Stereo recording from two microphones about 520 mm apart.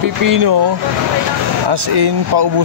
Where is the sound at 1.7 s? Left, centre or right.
Right.